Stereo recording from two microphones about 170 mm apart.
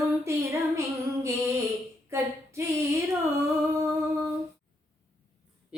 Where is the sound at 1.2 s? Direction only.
15° right (ahead or behind).